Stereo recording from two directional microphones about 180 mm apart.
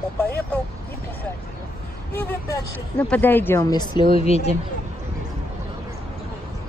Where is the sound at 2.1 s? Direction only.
15° left (ahead or behind).